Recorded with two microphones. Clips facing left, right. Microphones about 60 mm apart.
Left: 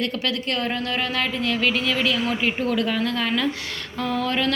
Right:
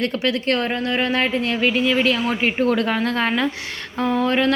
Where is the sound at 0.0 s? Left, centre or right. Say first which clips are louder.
Right 4 dB; right.